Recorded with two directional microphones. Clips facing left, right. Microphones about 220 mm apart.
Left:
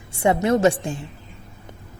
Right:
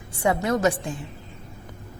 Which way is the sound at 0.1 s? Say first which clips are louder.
Left 4 dB; 25° left (ahead or behind).